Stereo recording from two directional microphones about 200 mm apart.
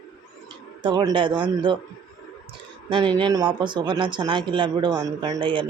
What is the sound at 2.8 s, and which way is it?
Speech, 25° right (ahead or behind).